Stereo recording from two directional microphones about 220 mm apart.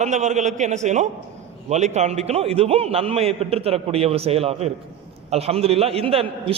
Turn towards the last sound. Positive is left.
turn(degrees=-25)  # may be behind; listen again after turning